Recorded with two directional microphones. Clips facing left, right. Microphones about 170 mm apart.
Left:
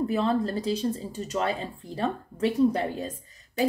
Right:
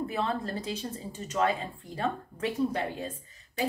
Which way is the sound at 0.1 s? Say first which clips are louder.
Left 6 dB; 35° left (ahead or behind).